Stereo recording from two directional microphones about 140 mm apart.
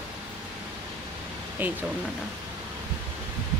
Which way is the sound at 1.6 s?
10° right (ahead or behind).